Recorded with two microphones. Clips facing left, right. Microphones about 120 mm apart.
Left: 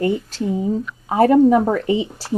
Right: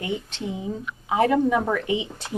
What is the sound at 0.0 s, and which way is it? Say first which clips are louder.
Speech: left 9 dB; 40° left (ahead or behind).